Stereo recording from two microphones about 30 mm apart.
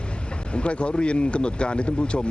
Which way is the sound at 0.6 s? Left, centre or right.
Left.